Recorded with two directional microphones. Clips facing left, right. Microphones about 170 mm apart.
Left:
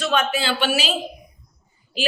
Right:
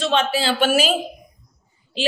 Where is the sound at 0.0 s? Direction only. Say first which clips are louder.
Right 2 dB; 30° right (ahead or behind); by 0.9 s 45° right (ahead or behind).